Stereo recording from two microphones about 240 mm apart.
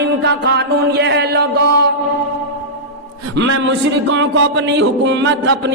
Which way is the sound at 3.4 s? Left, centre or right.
Right.